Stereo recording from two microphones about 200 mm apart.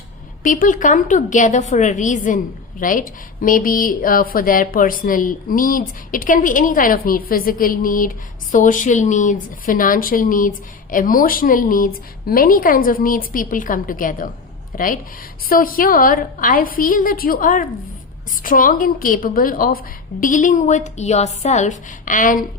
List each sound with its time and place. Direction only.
0.4 s a woman's voice: 40° left (ahead or behind)